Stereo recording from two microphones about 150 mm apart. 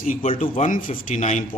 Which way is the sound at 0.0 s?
60° left (ahead or behind).